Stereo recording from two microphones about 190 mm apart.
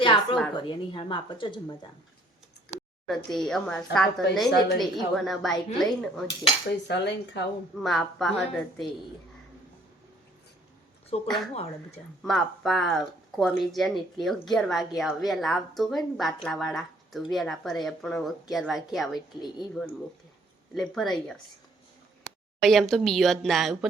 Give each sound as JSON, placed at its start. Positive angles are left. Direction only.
{"t": 0.0, "sound": "a sound", "side_deg": 25}
{"t": 0.5, "sound": "speech", "side_deg": 25}
{"t": 3.2, "sound": "a woman's voice", "side_deg": 0}
{"t": 6.8, "sound": "speech", "side_deg": 65}
{"t": 7.8, "sound": "a woman's voice", "side_deg": 0}
{"t": 11.1, "sound": "speech", "side_deg": 35}
{"t": 12.2, "sound": "a woman's voice", "side_deg": 0}
{"t": 20.7, "sound": "a woman's voice", "side_deg": 0}
{"t": 22.6, "sound": "a woman's voice", "side_deg": 0}